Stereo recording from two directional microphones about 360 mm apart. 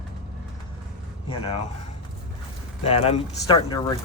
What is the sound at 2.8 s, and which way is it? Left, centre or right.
Speech, centre.